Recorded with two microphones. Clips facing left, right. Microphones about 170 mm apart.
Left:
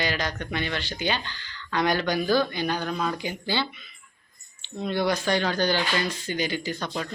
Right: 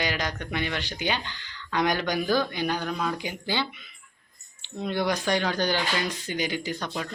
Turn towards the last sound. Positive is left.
turn(degrees=-5)  # may be behind; listen again after turning